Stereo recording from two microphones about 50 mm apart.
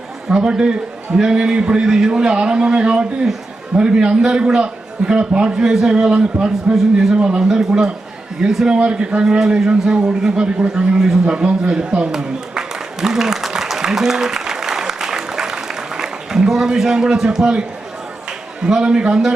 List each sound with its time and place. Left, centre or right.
0.3 s a man's voice: centre
11.7 s applause: centre
18.3 s a man's voice: centre